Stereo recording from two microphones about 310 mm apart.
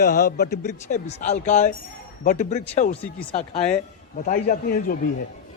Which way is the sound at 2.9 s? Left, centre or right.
Centre.